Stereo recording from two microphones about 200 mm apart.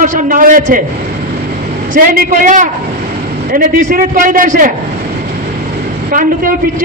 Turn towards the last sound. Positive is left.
turn(degrees=-45)  # may be behind; listen again after turning